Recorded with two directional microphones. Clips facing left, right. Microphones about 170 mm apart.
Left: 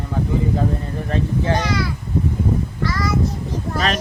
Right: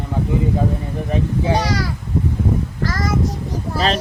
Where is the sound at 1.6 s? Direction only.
40° right (ahead or behind).